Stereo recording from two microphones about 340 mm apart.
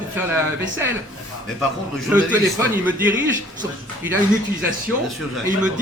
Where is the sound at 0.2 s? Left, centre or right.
Centre.